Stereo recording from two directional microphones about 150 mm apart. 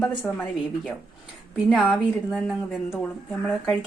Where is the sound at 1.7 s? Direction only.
Centre (ahead or behind).